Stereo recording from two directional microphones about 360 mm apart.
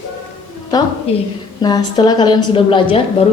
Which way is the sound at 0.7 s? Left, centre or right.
Centre.